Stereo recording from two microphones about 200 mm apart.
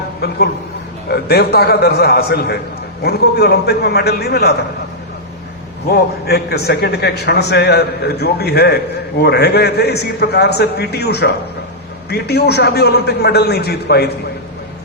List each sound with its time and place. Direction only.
1.0 s a man's voice: 50° left (ahead or behind)
5.9 s a man's voice: 50° left (ahead or behind)